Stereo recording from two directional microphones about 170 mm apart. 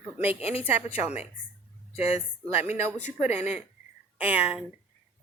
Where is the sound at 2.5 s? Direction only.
40° left (ahead or behind).